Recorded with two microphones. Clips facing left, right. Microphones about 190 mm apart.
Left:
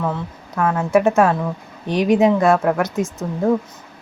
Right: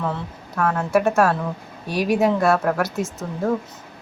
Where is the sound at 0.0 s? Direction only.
10° left (ahead or behind).